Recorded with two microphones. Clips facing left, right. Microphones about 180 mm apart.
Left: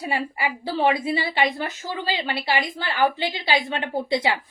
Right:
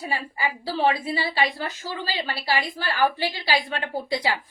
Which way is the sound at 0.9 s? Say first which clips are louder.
Left 2 dB; 20° left (ahead or behind).